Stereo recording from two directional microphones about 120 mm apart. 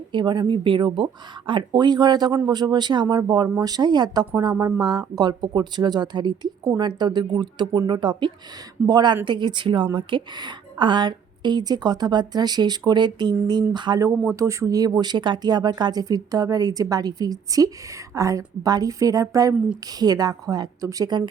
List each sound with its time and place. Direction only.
0.1 s a woman's voice: 40° right (ahead or behind)
14.3 s a woman's voice: 25° right (ahead or behind)